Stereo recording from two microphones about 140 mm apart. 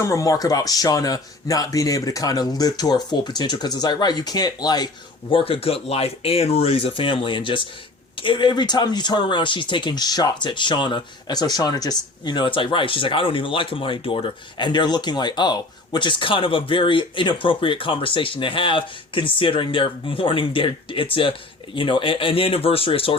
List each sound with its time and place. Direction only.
0.0 s speech: 20° left (ahead or behind)
5.3 s speech: 40° left (ahead or behind)